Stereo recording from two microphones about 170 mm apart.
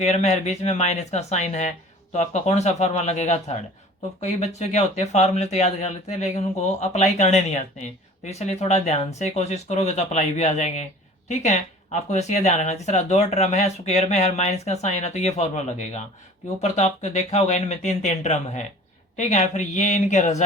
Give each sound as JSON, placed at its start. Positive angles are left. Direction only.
{"t": 0.0, "sound": "speech", "side_deg": 40}